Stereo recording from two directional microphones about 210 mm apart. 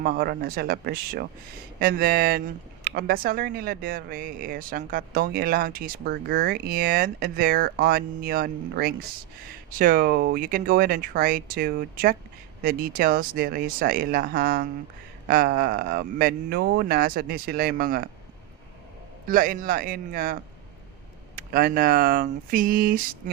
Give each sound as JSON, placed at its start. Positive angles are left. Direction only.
{"t": 0.0, "sound": "speech", "side_deg": -45}
{"t": 19.3, "sound": "speech", "side_deg": -40}